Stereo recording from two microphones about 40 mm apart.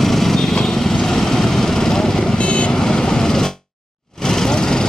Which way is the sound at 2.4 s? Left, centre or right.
Left.